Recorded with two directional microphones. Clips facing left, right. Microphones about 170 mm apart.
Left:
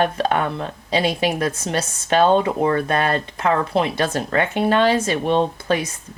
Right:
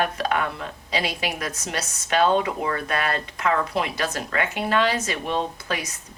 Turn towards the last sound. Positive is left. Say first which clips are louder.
# left 8 dB
turn(degrees=30)  # may be behind; listen again after turning